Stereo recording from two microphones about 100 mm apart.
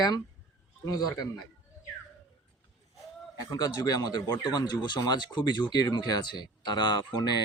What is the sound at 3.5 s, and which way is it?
Speech, 40° left (ahead or behind).